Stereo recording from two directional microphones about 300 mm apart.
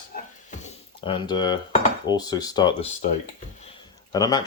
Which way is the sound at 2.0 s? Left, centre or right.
Centre.